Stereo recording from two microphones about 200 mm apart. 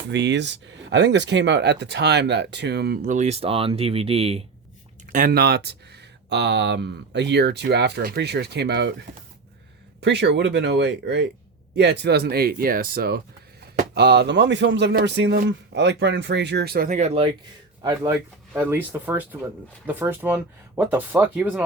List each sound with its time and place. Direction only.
0.1 s speech: 60° right (ahead or behind); by 4.4 s 30° right (ahead or behind)
5.1 s speech: 50° right (ahead or behind)
10.0 s speech: 60° right (ahead or behind); by 17.3 s 30° right (ahead or behind)
18.5 s speech: 10° right (ahead or behind)